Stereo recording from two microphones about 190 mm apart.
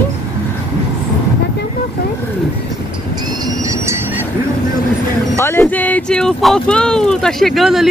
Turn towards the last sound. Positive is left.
turn(degrees=0)  # may be behind; listen again after turning